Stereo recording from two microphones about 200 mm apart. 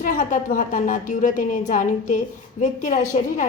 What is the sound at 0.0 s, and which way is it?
A woman's voice, 40° left (ahead or behind).